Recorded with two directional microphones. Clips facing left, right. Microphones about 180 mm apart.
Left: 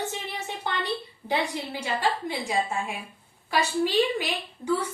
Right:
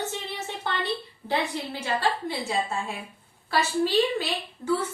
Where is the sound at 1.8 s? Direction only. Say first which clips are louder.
Right 1 dB; 15° left (ahead or behind).